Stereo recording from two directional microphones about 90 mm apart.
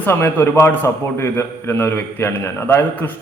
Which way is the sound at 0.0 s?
25° left (ahead or behind).